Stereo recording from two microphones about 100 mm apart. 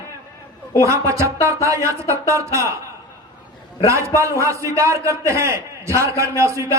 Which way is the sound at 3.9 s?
30° right (ahead or behind).